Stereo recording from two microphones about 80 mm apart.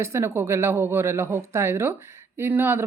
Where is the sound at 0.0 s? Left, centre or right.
Right.